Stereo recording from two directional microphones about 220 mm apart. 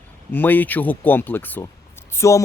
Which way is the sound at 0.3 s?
10° left (ahead or behind).